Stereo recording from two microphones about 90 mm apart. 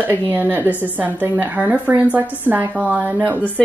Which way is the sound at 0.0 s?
20° right (ahead or behind).